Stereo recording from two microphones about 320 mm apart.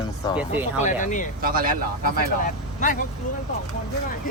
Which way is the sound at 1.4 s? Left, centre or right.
Right.